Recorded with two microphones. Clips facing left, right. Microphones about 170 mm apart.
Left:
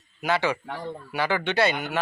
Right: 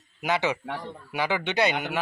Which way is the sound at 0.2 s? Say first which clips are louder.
Left 1 dB; 20° right (ahead or behind).